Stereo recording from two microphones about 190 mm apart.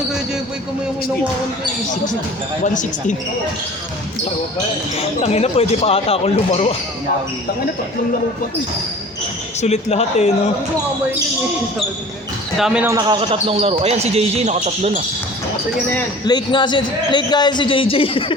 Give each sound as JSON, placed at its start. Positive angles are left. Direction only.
{"t": 4.9, "sound": "speech", "side_deg": 35}
{"t": 9.6, "sound": "speech", "side_deg": 35}
{"t": 12.5, "sound": "speech", "side_deg": 0}
{"t": 12.8, "sound": "a man's voice", "side_deg": -15}
{"t": 16.2, "sound": "a man's voice", "side_deg": 25}